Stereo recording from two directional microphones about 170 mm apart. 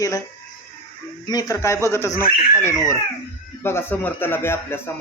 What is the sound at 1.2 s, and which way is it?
Speech, 20° left (ahead or behind).